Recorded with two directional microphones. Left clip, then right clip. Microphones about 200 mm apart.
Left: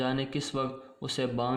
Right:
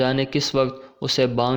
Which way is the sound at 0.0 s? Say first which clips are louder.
Right 10 dB; 30° right (ahead or behind).